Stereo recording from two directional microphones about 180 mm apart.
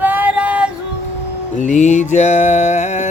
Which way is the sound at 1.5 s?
40° left (ahead or behind).